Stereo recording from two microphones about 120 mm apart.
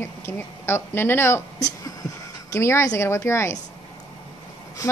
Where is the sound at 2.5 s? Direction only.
25° left (ahead or behind).